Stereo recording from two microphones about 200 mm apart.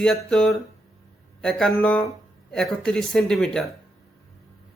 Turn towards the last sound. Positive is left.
turn(degrees=5)  # may be behind; listen again after turning